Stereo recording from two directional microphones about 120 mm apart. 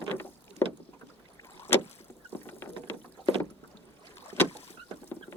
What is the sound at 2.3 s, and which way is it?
Vehicle, 20° left (ahead or behind).